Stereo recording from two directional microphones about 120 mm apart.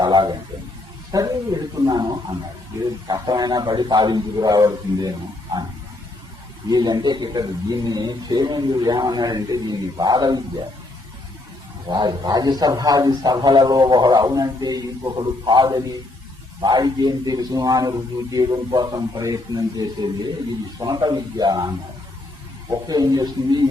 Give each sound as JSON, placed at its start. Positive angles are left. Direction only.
{"t": 0.0, "sound": "a man's voice", "side_deg": -40}
{"t": 6.7, "sound": "a man's voice", "side_deg": -35}
{"t": 11.9, "sound": "a man's voice", "side_deg": -35}
{"t": 22.7, "sound": "a man's voice", "side_deg": -35}